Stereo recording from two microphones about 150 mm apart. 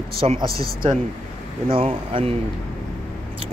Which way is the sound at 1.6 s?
40° right (ahead or behind).